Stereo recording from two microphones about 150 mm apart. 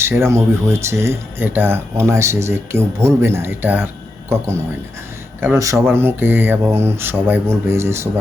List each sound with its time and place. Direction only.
0.0 s speech: 15° right (ahead or behind)